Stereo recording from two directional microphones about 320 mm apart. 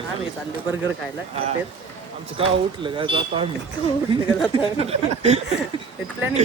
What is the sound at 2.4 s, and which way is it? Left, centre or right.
Speech, centre.